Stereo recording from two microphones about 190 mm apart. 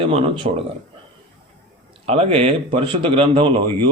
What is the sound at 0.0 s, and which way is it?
Speech, 30° right (ahead or behind).